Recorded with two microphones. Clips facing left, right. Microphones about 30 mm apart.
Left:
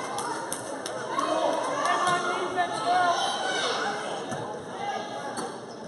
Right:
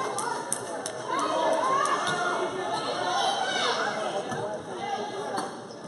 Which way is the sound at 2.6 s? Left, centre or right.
Centre.